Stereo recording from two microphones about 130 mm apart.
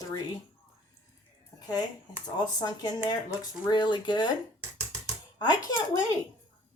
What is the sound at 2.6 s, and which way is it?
Speech, 30° left (ahead or behind).